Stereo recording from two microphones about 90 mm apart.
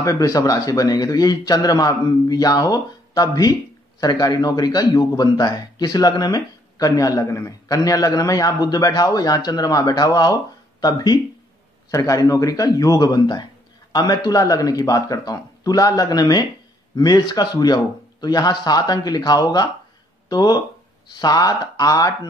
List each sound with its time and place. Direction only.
0.0 s a man's voice: 40° left (ahead or behind)